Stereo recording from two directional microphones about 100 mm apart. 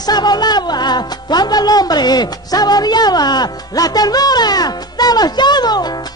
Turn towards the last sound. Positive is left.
turn(degrees=45)  # may be behind; listen again after turning